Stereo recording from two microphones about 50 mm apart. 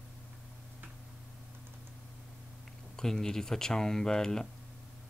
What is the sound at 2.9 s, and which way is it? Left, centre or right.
Speech, centre.